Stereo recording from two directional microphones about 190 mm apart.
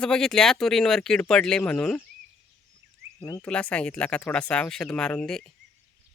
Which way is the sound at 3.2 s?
20° left (ahead or behind).